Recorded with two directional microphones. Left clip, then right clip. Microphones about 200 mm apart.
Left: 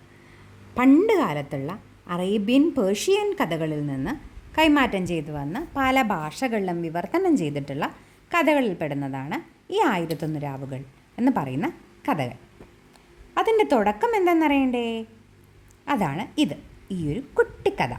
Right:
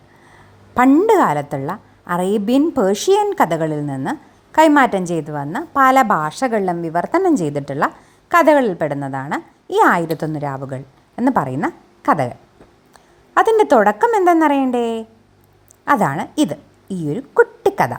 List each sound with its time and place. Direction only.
0.7 s a woman's voice: 10° right (ahead or behind)
13.3 s a woman's voice: 15° right (ahead or behind)